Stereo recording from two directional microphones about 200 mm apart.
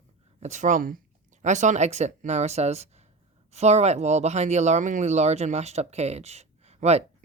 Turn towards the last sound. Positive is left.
turn(degrees=-35)  # may be behind; listen again after turning